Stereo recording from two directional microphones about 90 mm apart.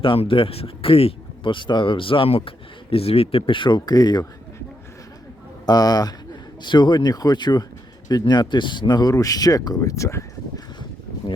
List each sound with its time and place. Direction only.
0.0 s speech: 75° left (ahead or behind); by 4.3 s 45° left (ahead or behind)
5.6 s speech: 45° left (ahead or behind)
6.6 s speech: 60° left (ahead or behind); by 10.2 s 35° left (ahead or behind)